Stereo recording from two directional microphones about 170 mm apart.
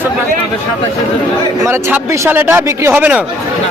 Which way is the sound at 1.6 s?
15° right (ahead or behind).